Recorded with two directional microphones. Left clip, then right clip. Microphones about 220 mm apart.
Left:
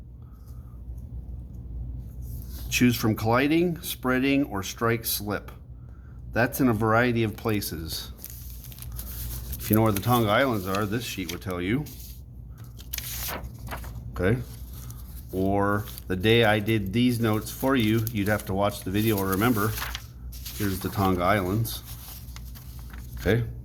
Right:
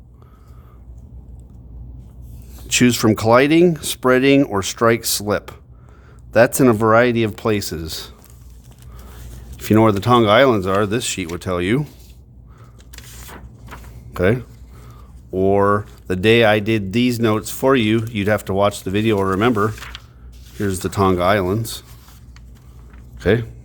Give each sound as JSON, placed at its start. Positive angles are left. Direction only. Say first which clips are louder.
{"t": 2.6, "sound": "speech", "louder": "right 9 dB", "side_deg": -45}
{"t": 9.6, "sound": "speech", "louder": "right 10 dB", "side_deg": -35}
{"t": 12.9, "sound": "biting", "louder": "left 4 dB", "side_deg": 20}
{"t": 14.1, "sound": "speech", "louder": "right 9 dB", "side_deg": -45}
{"t": 23.2, "sound": "speech", "louder": "right 8 dB", "side_deg": -40}